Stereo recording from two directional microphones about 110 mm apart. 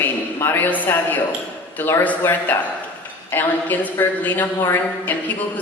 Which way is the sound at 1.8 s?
20° left (ahead or behind).